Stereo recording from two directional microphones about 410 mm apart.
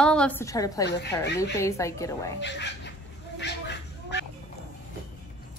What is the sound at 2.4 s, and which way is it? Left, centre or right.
Speech, left.